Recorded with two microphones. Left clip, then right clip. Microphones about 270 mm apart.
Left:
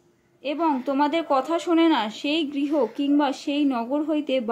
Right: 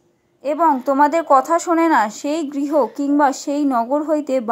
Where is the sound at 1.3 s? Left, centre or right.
Centre.